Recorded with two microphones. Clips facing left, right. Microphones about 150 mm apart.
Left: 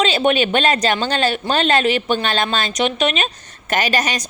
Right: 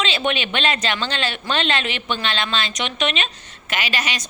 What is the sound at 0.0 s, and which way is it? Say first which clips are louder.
A woman's voice: left 7 dB; 40° left (ahead or behind).